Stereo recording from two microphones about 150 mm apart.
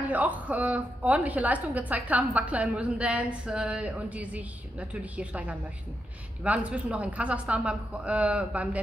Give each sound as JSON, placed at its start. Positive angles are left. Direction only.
{"t": 0.1, "sound": "a woman's voice", "side_deg": -10}